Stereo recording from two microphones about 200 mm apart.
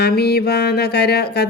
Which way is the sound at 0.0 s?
50° left (ahead or behind).